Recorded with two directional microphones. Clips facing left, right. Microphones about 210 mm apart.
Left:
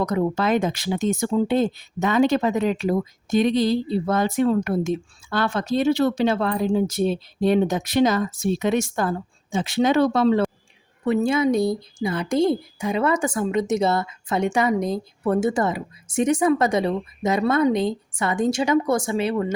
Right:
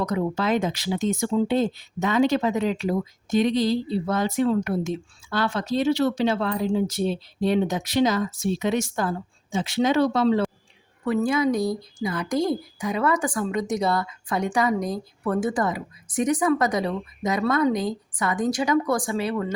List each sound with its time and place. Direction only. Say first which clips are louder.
0.0 s speech: left 3 dB; 50° left (ahead or behind)
11.0 s speech: left 2 dB; 25° left (ahead or behind)